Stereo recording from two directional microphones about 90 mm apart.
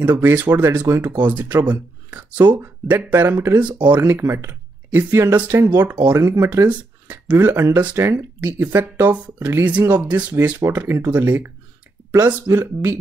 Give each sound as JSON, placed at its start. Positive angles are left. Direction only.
{"t": 0.0, "sound": "speech", "side_deg": -25}
{"t": 2.6, "sound": "speech", "side_deg": -25}
{"t": 8.4, "sound": "speech", "side_deg": -20}
{"t": 9.7, "sound": "speech", "side_deg": -20}